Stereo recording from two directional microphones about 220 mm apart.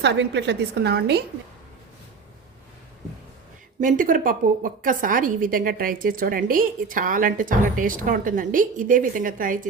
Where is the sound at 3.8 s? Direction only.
35° right (ahead or behind).